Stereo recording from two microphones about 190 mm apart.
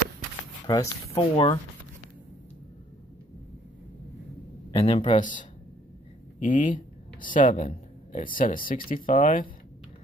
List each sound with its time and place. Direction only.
0.7 s speech: 20° left (ahead or behind)
4.6 s a man's voice: 30° left (ahead or behind)
6.4 s speech: 45° left (ahead or behind)